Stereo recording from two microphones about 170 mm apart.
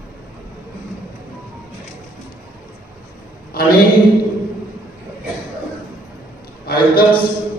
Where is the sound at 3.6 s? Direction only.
60° left (ahead or behind).